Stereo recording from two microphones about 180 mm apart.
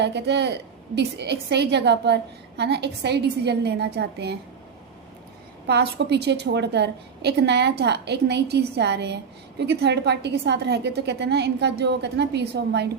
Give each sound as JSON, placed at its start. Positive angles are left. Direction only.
{"t": 0.0, "sound": "a woman's voice", "side_deg": -70}
{"t": 5.6, "sound": "a woman's voice", "side_deg": -65}